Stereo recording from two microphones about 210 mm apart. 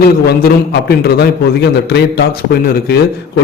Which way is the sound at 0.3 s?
50° left (ahead or behind).